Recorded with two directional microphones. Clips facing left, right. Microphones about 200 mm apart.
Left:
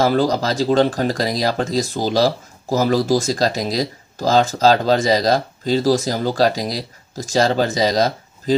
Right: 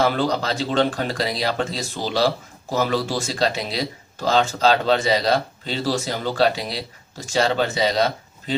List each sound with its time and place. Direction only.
0.0 s speech: 40° left (ahead or behind)